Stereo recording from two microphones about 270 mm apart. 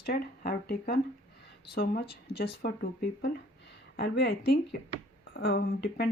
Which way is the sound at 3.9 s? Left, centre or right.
Left.